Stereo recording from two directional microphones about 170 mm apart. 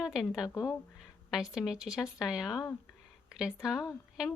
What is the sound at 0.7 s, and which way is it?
A woman's voice, centre (ahead or behind).